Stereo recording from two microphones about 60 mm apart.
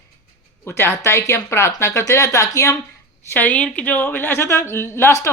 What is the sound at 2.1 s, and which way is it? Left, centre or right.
Speech, left.